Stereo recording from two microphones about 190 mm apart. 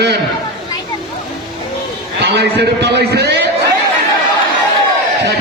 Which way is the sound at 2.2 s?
60° right (ahead or behind).